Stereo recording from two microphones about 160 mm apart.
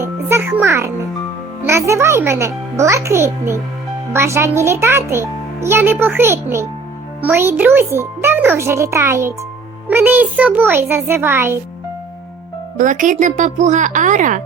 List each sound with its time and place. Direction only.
0.0 s a child's voice: 15° right (ahead or behind)
12.7 s speech: 55° right (ahead or behind)